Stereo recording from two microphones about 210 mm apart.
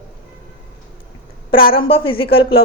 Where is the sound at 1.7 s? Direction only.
25° left (ahead or behind).